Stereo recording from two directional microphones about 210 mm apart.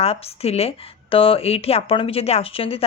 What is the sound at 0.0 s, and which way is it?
Speech, 30° left (ahead or behind).